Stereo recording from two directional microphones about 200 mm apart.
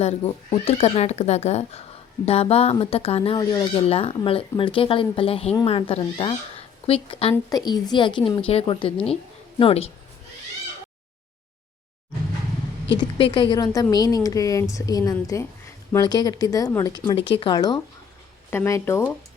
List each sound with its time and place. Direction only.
0.0 s speech: 30° left (ahead or behind)
13.0 s a woman's voice: 25° left (ahead or behind)